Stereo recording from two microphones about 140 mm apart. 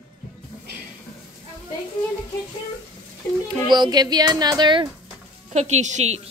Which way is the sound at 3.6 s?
30° right (ahead or behind).